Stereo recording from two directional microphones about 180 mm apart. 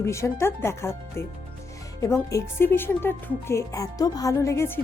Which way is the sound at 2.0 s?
15° left (ahead or behind).